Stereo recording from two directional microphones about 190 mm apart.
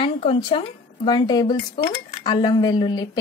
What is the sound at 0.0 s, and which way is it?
Speech, 30° left (ahead or behind).